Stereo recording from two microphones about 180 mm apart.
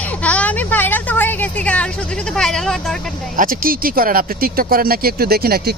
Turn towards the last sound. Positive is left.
turn(degrees=-60)  # may be behind; listen again after turning